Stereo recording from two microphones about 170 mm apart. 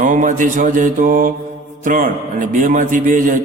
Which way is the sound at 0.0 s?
50° right (ahead or behind).